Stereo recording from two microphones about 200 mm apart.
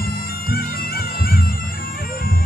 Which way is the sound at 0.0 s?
50° left (ahead or behind).